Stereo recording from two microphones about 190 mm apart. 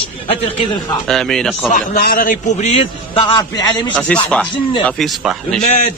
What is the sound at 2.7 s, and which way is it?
Speech, 25° left (ahead or behind).